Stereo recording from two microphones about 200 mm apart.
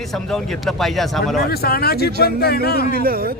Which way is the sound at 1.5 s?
50° left (ahead or behind).